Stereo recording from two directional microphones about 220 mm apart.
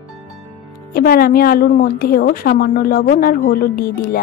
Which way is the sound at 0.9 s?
45° left (ahead or behind).